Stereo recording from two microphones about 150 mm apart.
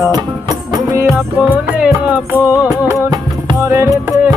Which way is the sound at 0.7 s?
20° right (ahead or behind).